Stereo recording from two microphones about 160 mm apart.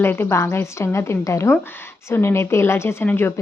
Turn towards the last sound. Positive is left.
turn(degrees=15)  # may be behind; listen again after turning